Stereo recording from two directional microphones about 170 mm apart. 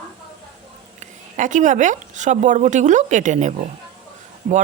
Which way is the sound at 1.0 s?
45° right (ahead or behind).